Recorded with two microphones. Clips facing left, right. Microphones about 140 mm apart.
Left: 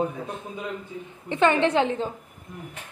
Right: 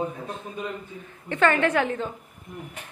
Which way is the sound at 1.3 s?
20° left (ahead or behind).